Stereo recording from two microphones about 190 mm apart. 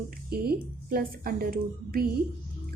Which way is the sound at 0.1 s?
55° right (ahead or behind).